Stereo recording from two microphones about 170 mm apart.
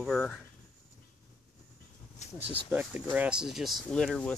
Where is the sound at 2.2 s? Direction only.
40° left (ahead or behind).